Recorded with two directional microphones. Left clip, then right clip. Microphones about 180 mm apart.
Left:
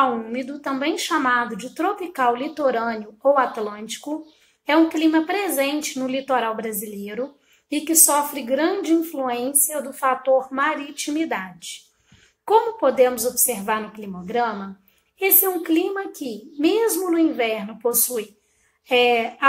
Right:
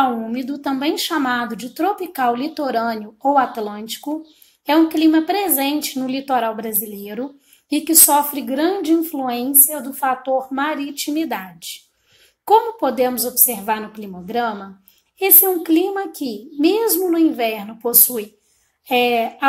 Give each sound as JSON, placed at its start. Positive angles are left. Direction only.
{"t": 0.0, "sound": "speech", "side_deg": -50}
{"t": 12.4, "sound": "speech", "side_deg": -45}